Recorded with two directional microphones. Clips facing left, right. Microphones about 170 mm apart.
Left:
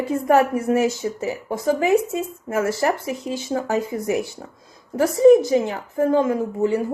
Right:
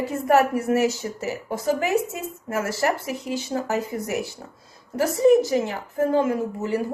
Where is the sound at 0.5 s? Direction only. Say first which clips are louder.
Left 2 dB; 25° left (ahead or behind).